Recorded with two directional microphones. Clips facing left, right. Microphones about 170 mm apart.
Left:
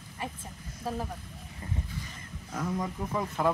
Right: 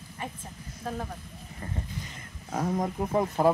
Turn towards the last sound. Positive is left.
turn(degrees=-55)  # may be behind; listen again after turning